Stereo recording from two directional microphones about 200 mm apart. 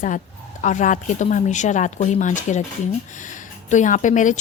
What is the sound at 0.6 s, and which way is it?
A woman's voice, 40° left (ahead or behind).